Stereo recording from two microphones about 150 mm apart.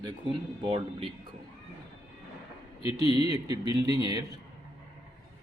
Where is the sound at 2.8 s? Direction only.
40° left (ahead or behind).